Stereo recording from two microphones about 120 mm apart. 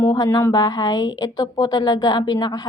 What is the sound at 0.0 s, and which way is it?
Speech, 30° left (ahead or behind).